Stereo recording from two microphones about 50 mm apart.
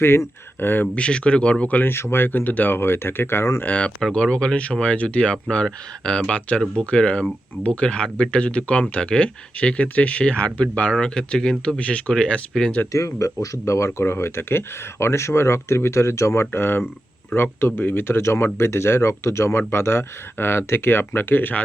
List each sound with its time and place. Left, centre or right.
0.6 s speech: left
0.9 s speech: left
1.8 s speech: left
3.6 s speech: left
4.0 s speech: centre
11.8 s speech: left
12.9 s speech: left
14.0 s speech: left